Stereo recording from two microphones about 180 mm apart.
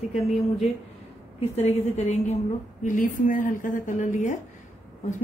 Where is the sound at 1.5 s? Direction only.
35° left (ahead or behind).